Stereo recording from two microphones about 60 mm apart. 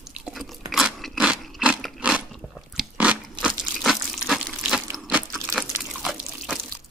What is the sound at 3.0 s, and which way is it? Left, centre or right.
Crunch, centre.